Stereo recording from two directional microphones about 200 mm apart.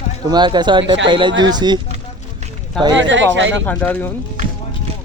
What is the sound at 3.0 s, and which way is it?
Speech, 65° right (ahead or behind).